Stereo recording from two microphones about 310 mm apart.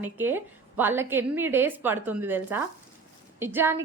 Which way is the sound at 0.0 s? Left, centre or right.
Centre.